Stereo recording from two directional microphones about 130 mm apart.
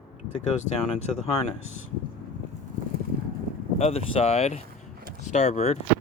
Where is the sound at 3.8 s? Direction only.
55° left (ahead or behind).